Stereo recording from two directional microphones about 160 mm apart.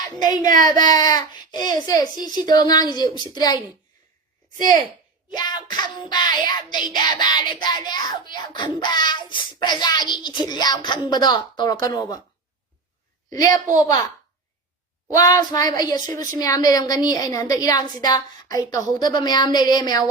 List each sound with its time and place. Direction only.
0.2 s a child's voice: 25° left (ahead or behind)
0.4 s speech: 55° right (ahead or behind)
0.9 s a child's voice: 25° left (ahead or behind)
5.4 s a sound: 25° left (ahead or behind)
6.1 s a child's voice: 25° left (ahead or behind)
13.3 s a child's voice: 20° left (ahead or behind)
15.1 s a child's voice: 25° left (ahead or behind)